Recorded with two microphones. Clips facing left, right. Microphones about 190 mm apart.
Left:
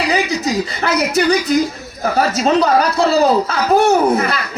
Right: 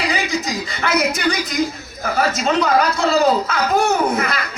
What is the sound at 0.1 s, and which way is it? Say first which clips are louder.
Speech: left 5 dB; 35° left (ahead or behind).